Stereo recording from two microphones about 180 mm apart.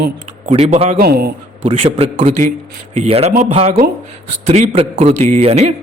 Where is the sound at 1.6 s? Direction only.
35° right (ahead or behind).